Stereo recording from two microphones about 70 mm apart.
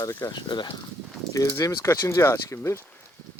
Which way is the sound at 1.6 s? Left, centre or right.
Left.